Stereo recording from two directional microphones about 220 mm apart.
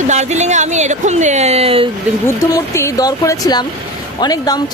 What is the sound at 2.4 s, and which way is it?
Speech, 15° left (ahead or behind).